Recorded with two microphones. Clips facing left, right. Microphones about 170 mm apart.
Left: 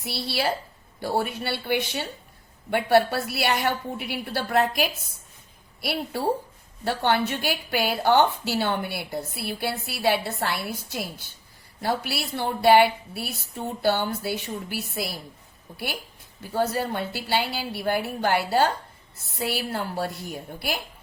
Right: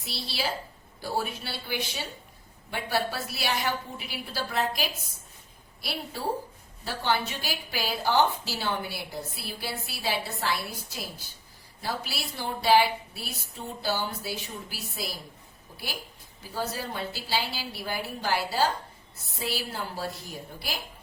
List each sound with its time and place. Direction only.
0.0 s a woman's voice: 60° left (ahead or behind)
16.5 s a woman's voice: 60° left (ahead or behind)